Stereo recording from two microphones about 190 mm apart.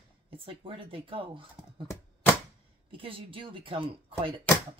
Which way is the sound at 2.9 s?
30° right (ahead or behind).